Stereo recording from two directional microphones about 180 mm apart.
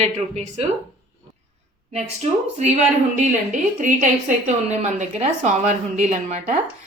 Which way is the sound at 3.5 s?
45° right (ahead or behind).